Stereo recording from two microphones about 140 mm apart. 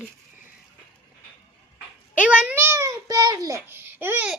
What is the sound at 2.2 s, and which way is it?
Babbling, 10° right (ahead or behind).